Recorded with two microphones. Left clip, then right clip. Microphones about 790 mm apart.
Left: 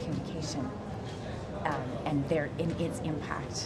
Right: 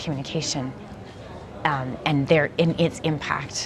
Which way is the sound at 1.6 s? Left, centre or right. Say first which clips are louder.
Right 10 dB; right.